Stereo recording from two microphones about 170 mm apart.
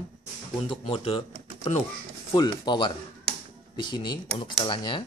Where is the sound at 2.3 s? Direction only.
25° left (ahead or behind).